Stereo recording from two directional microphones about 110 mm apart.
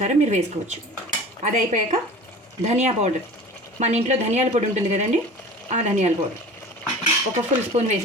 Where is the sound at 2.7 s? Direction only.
85° right.